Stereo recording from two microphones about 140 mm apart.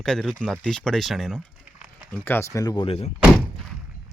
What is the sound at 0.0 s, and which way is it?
Speech, 5° left (ahead or behind).